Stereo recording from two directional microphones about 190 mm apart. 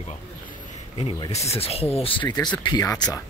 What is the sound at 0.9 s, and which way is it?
Speech, 30° left (ahead or behind).